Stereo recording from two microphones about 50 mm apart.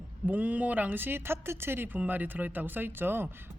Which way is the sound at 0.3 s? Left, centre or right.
Right.